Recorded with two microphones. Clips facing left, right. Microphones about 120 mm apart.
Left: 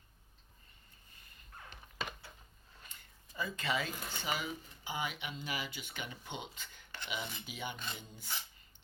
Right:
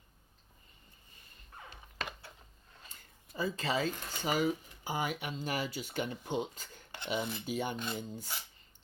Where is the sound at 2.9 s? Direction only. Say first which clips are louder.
Right 5 dB; 35° right (ahead or behind).